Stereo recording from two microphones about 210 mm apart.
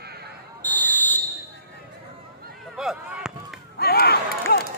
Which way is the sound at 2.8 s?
Centre (ahead or behind).